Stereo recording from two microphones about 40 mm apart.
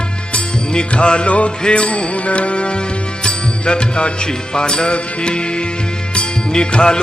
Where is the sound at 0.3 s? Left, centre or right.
Left.